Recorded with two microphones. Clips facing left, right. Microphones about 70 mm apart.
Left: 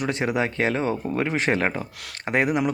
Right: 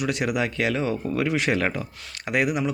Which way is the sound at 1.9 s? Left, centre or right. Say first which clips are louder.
Left 2 dB; left.